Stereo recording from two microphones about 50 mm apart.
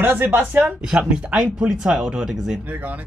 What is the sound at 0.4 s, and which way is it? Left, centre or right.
Speech, right.